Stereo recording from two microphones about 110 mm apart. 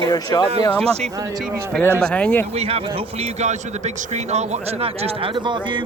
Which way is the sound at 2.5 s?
65° right (ahead or behind).